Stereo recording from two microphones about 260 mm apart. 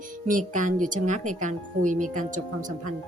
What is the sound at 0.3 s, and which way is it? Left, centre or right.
Speech, right.